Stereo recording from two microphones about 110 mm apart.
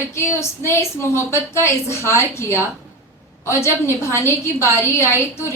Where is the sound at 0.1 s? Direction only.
25° left (ahead or behind).